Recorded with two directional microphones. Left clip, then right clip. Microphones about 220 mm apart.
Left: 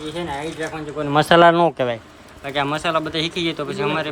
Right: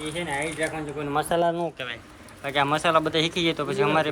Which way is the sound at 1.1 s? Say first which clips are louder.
Left 10 dB; 40° left (ahead or behind).